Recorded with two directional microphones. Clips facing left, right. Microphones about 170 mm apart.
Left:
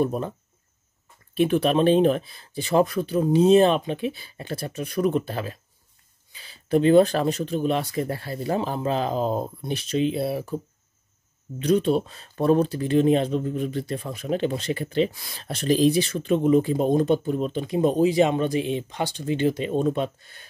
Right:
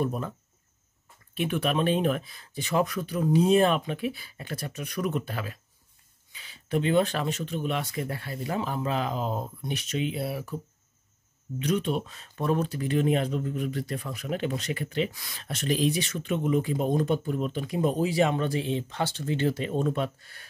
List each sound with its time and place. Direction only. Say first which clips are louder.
0.0 s speech: left 5 dB; 30° left (ahead or behind)
1.3 s speech: left 7 dB; 35° left (ahead or behind)
11.6 s speech: left 7 dB; 35° left (ahead or behind)